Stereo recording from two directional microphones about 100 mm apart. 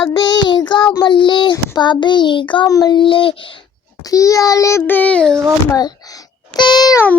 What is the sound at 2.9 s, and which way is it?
Speech, 55° left (ahead or behind).